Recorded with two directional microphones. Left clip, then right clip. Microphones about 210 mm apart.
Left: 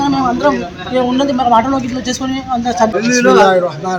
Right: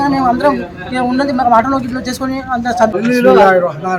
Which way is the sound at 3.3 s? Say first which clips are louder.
Right 1 dB; 30° right (ahead or behind).